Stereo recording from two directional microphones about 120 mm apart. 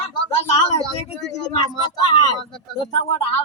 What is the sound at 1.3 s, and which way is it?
Speech, 35° left (ahead or behind).